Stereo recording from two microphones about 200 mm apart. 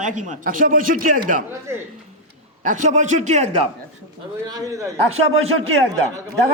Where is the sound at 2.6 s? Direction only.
40° right (ahead or behind).